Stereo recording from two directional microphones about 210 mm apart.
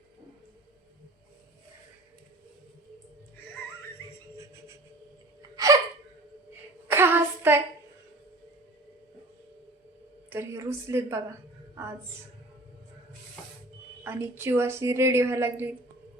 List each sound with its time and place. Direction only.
5.5 s hiccup: 15° right (ahead or behind)
6.9 s a sound: 10° right (ahead or behind)
10.2 s a woman's voice: 10° right (ahead or behind)
14.0 s a woman's voice: 10° right (ahead or behind)